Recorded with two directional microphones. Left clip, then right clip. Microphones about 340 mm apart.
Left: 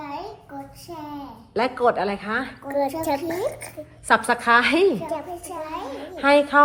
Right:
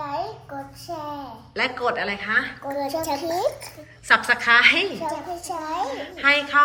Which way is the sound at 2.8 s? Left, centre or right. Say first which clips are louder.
Left 3 dB; left.